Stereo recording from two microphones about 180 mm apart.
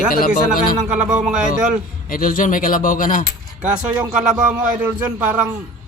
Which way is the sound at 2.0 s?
50° left (ahead or behind).